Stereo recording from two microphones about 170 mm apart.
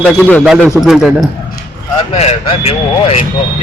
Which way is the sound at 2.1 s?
35° left (ahead or behind).